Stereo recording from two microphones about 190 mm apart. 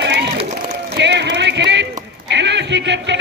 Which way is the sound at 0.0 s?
65° right (ahead or behind).